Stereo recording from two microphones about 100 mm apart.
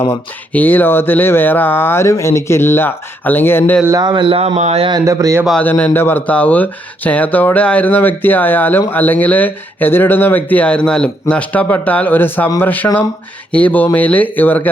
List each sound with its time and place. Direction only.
0.1 s speech: 20° left (ahead or behind)
4.0 s speech: 45° right (ahead or behind)
4.3 s speech: 75° right (ahead or behind)
4.9 s speech: 40° right (ahead or behind)
5.5 s speech: 15° left (ahead or behind)